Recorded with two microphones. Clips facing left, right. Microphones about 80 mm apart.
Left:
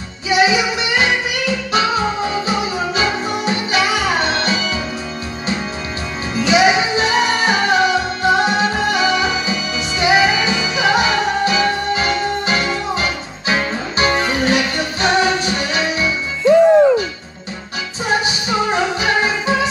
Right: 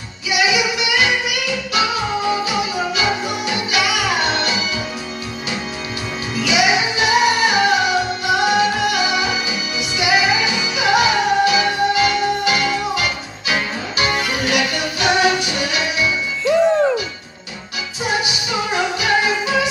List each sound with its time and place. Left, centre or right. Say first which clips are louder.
0.3 s music: left 3 dB; left
3.0 s music: left 1 dB; left
6.4 s music: left 4 dB; left
18.2 s music: left 4 dB; left